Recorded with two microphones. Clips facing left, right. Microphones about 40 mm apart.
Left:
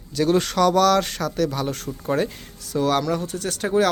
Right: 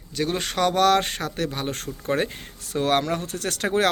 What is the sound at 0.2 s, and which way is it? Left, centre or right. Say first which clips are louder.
Speech: left 5 dB; right.